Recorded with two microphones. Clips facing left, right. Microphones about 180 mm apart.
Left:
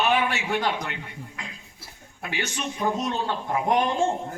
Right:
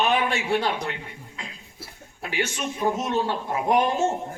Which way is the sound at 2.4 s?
25° right (ahead or behind).